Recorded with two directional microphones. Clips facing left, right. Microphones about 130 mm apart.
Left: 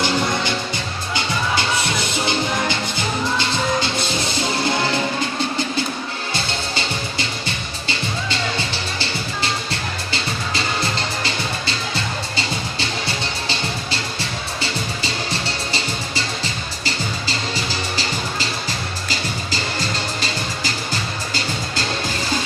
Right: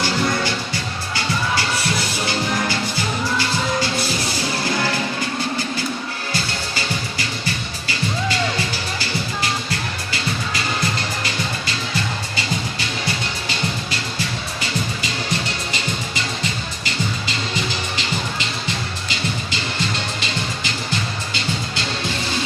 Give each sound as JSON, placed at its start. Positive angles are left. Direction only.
{"t": 1.1, "sound": "music", "side_deg": 20}
{"t": 6.3, "sound": "music", "side_deg": 25}